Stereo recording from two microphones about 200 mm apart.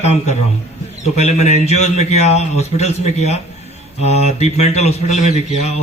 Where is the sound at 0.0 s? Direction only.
35° left (ahead or behind).